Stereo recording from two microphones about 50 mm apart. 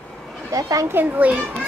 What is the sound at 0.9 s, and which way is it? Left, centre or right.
Speech, right.